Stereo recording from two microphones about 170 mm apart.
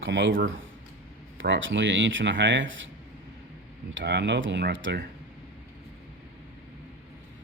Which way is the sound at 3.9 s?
90° right.